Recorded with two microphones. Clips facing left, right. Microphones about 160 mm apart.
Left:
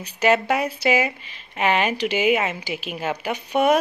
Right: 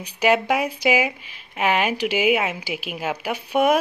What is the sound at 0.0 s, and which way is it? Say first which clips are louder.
A woman's voice: even; 10° right (ahead or behind).